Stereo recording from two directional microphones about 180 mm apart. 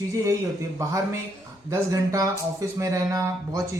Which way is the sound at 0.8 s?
20° right (ahead or behind).